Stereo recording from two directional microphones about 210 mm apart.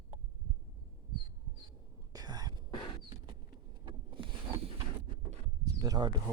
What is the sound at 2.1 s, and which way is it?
Whispering, 20° right (ahead or behind).